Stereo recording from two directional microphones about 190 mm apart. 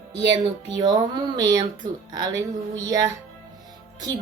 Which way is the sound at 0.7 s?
20° right (ahead or behind).